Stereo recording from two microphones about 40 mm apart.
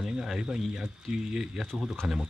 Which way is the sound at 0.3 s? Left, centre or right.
Centre.